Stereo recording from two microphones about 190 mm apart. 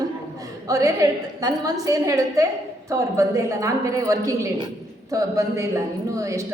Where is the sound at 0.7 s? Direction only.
15° right (ahead or behind).